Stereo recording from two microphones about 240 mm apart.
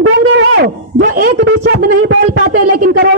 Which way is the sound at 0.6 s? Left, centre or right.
Right.